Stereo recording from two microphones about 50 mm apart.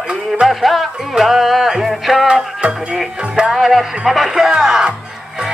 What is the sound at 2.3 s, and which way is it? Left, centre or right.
Music, centre.